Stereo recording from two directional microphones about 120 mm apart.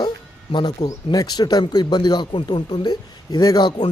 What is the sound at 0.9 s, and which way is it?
Speech, 30° left (ahead or behind).